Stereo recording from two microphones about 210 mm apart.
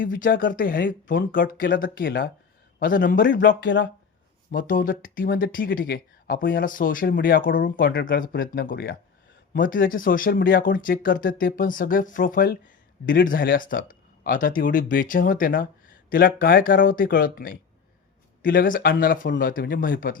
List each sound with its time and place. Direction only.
0.0 s speech: 40° left (ahead or behind)
3.3 s speech: 55° left (ahead or behind)
4.5 s speech: 40° left (ahead or behind)